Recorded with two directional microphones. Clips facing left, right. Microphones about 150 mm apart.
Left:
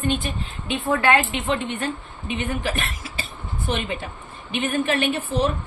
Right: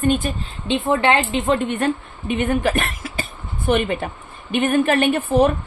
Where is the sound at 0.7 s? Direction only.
25° right (ahead or behind).